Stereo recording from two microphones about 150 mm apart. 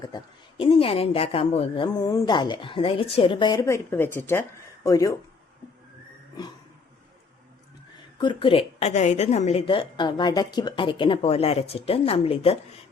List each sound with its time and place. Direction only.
0.0 s speech: 30° left (ahead or behind)
8.2 s speech: 35° left (ahead or behind)
8.9 s speech: 50° left (ahead or behind)